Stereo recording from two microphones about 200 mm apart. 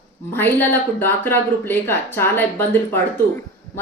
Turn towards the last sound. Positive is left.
turn(degrees=10)  # may be behind; listen again after turning